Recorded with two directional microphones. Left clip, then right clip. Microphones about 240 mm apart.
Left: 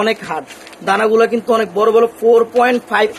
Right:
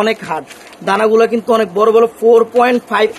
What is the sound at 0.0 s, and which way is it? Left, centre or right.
Speech, right.